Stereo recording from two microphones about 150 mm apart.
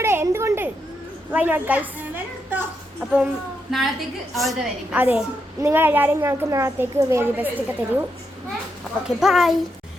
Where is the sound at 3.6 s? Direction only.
Centre (ahead or behind).